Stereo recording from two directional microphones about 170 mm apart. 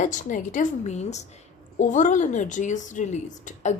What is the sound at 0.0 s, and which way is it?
A woman's voice, 50° left (ahead or behind).